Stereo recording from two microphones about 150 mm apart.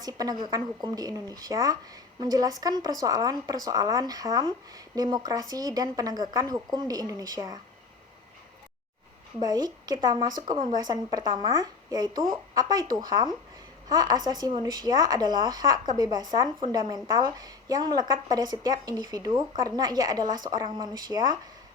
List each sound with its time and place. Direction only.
0.0 s speech: 25° right (ahead or behind)
9.4 s speech: 25° right (ahead or behind)